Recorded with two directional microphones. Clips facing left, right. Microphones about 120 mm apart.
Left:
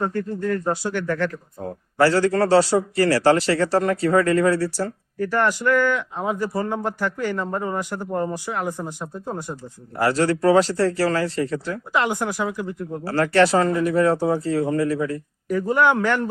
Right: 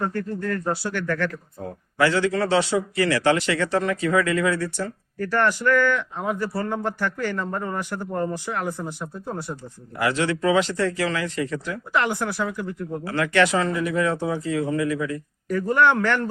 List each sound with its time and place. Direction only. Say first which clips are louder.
0.0 s speech: left 2 dB; 15° left (ahead or behind)
2.0 s a man's voice: left 3 dB; 40° left (ahead or behind)
5.2 s speech: left 1 dB; 15° left (ahead or behind)
10.0 s a man's voice: left 3 dB; 40° left (ahead or behind)
11.9 s speech: left 1 dB; 15° left (ahead or behind)
13.1 s a man's voice: left 3 dB; 35° left (ahead or behind)
15.4 s speech: left 1 dB; 15° left (ahead or behind)